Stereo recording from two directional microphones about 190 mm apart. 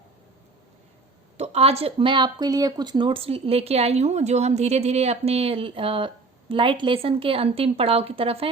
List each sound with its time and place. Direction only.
1.4 s a woman's voice: 30° right (ahead or behind)